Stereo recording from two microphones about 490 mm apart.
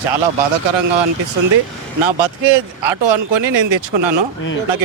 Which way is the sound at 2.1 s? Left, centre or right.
Right.